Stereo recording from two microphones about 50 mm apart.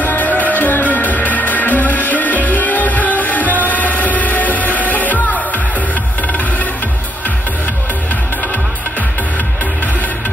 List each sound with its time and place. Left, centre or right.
0.0 s music: left